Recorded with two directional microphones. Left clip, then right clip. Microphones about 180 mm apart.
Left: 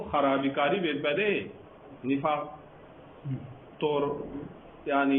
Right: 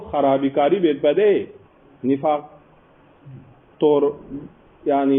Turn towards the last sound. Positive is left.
turn(degrees=-35)  # may be behind; listen again after turning